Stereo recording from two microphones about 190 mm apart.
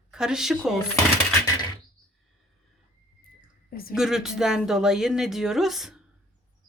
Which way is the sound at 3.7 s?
50° left (ahead or behind).